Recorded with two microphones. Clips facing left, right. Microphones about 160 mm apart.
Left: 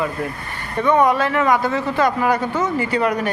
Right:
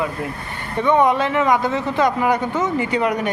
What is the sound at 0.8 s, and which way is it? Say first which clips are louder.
Speech: even; 20° right (ahead or behind).